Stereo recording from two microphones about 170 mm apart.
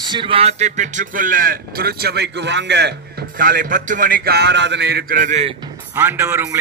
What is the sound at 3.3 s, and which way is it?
A man's voice, 55° right (ahead or behind).